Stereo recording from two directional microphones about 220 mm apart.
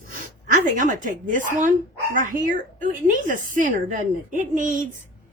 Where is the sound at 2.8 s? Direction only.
35° right (ahead or behind).